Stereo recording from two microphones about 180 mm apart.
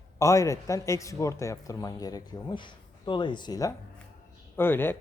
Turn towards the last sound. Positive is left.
turn(degrees=10)  # may be behind; listen again after turning